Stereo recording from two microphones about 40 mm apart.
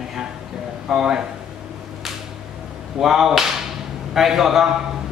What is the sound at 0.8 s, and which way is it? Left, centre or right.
Speech, centre.